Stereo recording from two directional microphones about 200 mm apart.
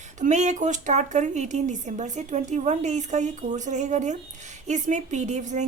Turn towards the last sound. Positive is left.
turn(degrees=-35)  # may be behind; listen again after turning